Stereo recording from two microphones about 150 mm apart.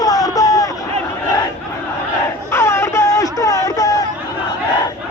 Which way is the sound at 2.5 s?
15° left (ahead or behind).